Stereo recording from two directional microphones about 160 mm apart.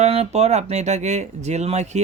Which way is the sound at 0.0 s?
40° right (ahead or behind).